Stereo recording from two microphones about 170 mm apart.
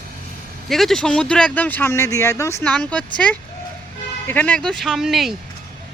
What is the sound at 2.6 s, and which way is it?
Speech, 5° left (ahead or behind).